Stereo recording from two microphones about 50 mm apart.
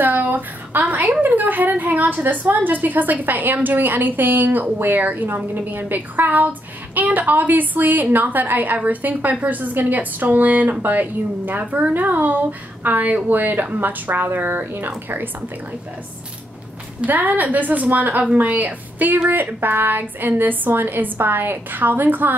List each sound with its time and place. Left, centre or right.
0.0 s a sound: right
1.2 s a woman's voice: right
17.0 s a woman's voice: right